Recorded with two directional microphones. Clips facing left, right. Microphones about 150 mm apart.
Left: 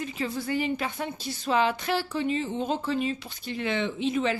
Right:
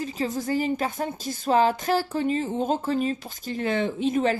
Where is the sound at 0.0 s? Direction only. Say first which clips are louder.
Right 3 dB; 40° right (ahead or behind).